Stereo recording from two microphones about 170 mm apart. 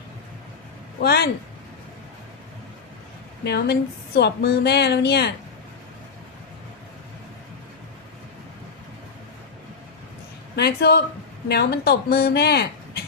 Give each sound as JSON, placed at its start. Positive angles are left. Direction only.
{"t": 1.0, "sound": "speech", "side_deg": 70}
{"t": 3.4, "sound": "speech", "side_deg": 70}
{"t": 10.5, "sound": "speech", "side_deg": 70}